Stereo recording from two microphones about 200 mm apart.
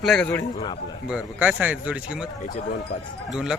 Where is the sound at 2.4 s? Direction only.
40° left (ahead or behind).